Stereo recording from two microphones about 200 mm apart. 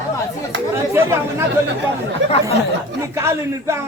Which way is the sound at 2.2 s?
65° right (ahead or behind).